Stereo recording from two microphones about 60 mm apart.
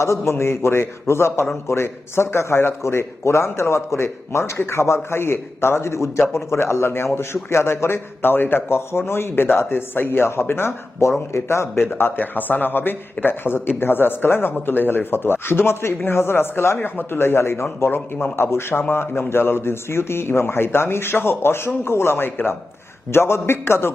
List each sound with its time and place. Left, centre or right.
0.0 s a man's voice: left